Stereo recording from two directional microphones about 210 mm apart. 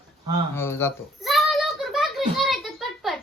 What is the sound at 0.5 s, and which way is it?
Speech, 10° left (ahead or behind).